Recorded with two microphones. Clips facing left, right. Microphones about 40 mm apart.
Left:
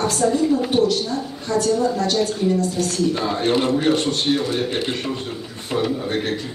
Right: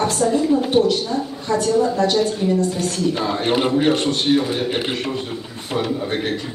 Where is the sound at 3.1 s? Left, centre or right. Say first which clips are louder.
Even; centre.